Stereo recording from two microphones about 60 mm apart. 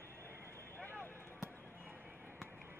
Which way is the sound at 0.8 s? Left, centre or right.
Left.